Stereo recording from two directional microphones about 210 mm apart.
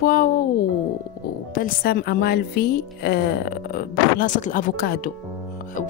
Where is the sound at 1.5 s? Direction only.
45° left (ahead or behind).